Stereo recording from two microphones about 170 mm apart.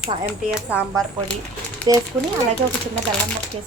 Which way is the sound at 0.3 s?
15° right (ahead or behind).